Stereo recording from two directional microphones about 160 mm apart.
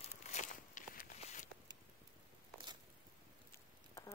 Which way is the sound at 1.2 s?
45° left (ahead or behind).